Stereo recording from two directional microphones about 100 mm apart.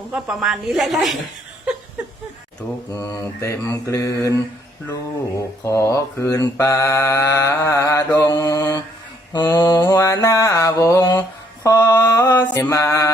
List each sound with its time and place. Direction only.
0.1 s a woman's voice: 5° right (ahead or behind)
2.9 s mantra: 30° left (ahead or behind)
5.4 s mantra: 30° left (ahead or behind)
8.2 s mantra: 35° left (ahead or behind)
12.2 s mantra: 20° left (ahead or behind)
12.7 s mantra: 30° left (ahead or behind)